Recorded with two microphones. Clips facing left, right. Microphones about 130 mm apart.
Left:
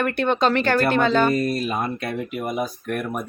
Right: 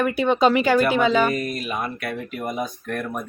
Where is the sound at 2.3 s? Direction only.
10° left (ahead or behind).